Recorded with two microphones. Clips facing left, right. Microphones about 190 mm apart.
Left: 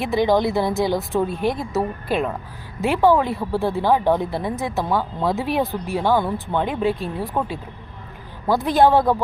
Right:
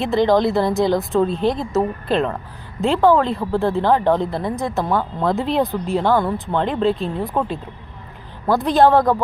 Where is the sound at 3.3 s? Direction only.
15° right (ahead or behind).